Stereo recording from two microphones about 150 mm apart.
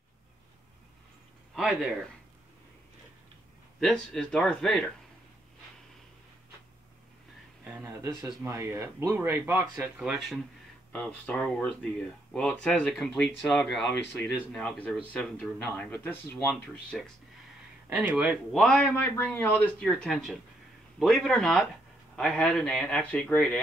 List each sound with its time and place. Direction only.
1.5 s speech: 5° right (ahead or behind)
3.8 s speech: 5° left (ahead or behind)
7.6 s a sound: 15° right (ahead or behind)
8.4 s speech: 15° right (ahead or behind); by 16.3 s 15° left (ahead or behind)
16.9 s speech: centre (ahead or behind)
17.8 s speech: 10° right (ahead or behind); by 23.6 s 5° left (ahead or behind)